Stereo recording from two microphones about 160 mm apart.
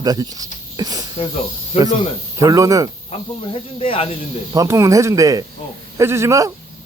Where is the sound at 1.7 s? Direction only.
40° left (ahead or behind).